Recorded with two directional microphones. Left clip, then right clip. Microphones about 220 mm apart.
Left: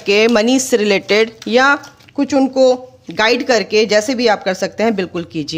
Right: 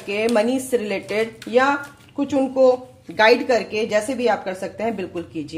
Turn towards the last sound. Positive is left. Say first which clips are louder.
# left 7 dB
turn(degrees=45)  # may be behind; listen again after turning